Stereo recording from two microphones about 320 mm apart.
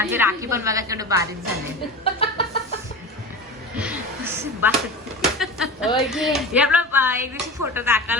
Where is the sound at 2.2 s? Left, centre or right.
Centre.